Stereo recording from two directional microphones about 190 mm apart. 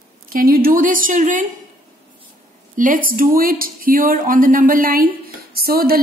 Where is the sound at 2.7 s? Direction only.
45° right (ahead or behind).